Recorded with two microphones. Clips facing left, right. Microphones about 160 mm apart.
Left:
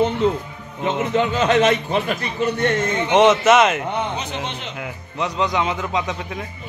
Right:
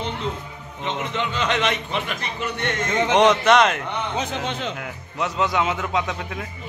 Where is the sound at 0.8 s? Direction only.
40° left (ahead or behind).